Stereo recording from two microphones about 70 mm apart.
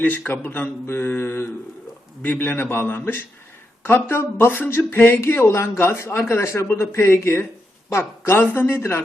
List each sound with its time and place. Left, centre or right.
0.3 s a man's voice: left